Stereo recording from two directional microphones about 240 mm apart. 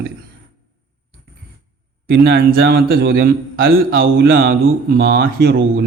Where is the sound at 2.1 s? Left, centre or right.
Right.